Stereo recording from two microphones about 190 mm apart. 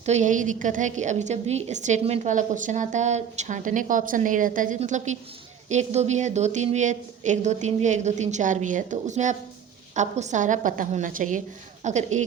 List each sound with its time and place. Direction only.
0.0 s a woman's voice: 35° right (ahead or behind)